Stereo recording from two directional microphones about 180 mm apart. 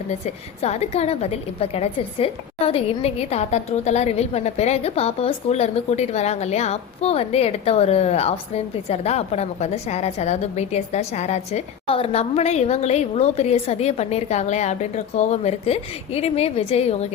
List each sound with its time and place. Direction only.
0.6 s a woman's voice: 35° left (ahead or behind)